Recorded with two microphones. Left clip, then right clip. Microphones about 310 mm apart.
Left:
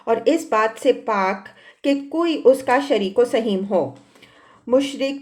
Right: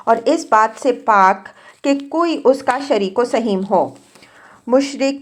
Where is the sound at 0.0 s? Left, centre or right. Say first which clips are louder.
Right 4 dB; right.